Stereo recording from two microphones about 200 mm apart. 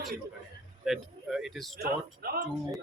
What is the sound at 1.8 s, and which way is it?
Speech, 50° right (ahead or behind).